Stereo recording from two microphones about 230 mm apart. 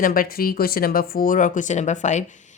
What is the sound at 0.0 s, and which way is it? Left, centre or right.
Speech, left.